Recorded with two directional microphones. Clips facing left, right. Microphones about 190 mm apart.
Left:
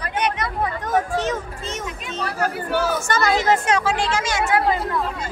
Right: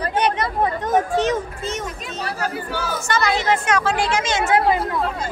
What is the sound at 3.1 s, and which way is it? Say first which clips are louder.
Speech: right 1 dB; 45° left (ahead or behind).